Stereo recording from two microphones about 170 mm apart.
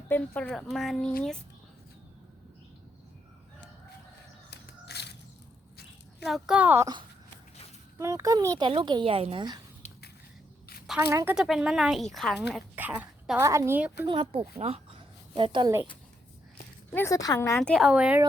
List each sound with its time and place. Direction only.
0.1 s speech: 10° left (ahead or behind)
4.5 s a sound: 75° left (ahead or behind)
6.2 s speech: centre (ahead or behind)
7.9 s speech: 20° right (ahead or behind)
11.1 s a woman's voice: 15° right (ahead or behind)
11.3 s a woman's voice: 5° right (ahead or behind)
14.1 s speech: 30° right (ahead or behind)
14.6 s a sound: 35° right (ahead or behind)
16.9 s speech: 15° left (ahead or behind)
17.6 s speech: centre (ahead or behind)